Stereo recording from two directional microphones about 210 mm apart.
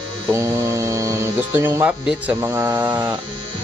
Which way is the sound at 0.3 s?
15° right (ahead or behind).